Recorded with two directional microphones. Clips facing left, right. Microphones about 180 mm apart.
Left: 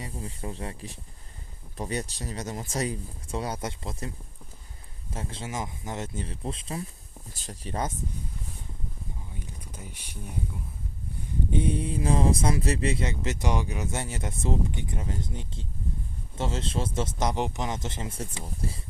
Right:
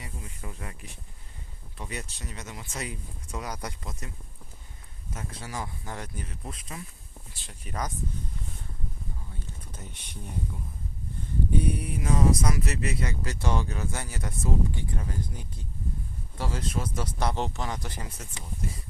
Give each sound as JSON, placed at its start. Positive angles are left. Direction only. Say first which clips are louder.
{"t": 0.0, "sound": "speech", "louder": "left 6 dB", "side_deg": 30}
{"t": 5.1, "sound": "speech", "louder": "left 3 dB", "side_deg": 25}
{"t": 7.3, "sound": "speech", "louder": "left 10 dB", "side_deg": 40}
{"t": 7.7, "sound": "speech", "louder": "left 3 dB", "side_deg": 25}
{"t": 9.3, "sound": "a sound", "louder": "left 2 dB", "side_deg": 10}
{"t": 11.5, "sound": "speech", "louder": "left 3 dB", "side_deg": 25}